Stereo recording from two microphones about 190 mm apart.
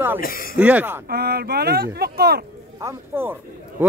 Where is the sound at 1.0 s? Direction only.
55° right (ahead or behind).